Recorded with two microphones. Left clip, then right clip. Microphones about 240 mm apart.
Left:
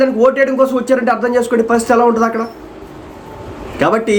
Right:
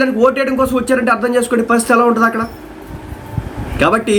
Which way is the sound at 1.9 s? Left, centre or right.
Centre.